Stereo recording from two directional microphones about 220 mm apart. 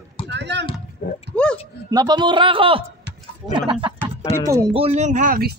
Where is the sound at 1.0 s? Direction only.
40° left (ahead or behind).